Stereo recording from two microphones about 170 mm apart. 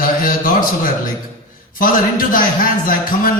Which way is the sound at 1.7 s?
55° left (ahead or behind).